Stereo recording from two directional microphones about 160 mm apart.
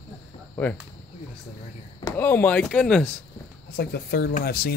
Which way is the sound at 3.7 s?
85° left.